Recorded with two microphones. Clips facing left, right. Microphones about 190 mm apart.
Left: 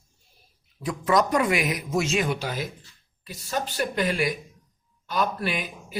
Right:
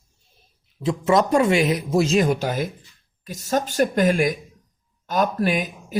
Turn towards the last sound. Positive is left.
turn(degrees=-45)  # may be behind; listen again after turning